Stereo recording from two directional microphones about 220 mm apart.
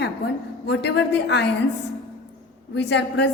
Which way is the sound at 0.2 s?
45° left (ahead or behind).